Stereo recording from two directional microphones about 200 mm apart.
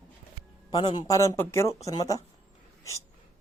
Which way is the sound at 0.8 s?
20° left (ahead or behind).